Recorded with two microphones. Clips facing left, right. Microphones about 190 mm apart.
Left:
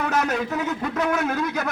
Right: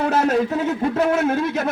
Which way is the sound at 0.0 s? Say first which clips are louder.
Right 5 dB; 30° right (ahead or behind).